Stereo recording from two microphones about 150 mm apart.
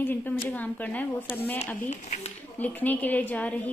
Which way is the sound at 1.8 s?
50° left (ahead or behind).